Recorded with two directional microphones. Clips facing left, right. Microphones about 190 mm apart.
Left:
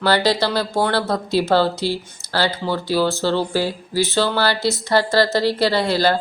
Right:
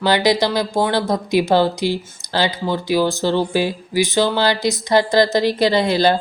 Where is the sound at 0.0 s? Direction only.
15° right (ahead or behind).